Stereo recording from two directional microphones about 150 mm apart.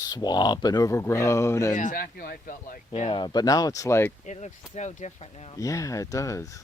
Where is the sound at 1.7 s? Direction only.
60° left (ahead or behind).